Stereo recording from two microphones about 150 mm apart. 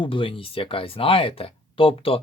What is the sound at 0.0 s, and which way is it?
Speech, 35° left (ahead or behind).